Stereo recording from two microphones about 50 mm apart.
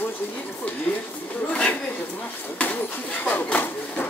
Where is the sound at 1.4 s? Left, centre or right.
Left.